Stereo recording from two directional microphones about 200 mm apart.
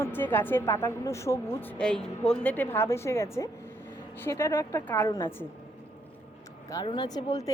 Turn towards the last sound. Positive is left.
turn(degrees=20)  # may be behind; listen again after turning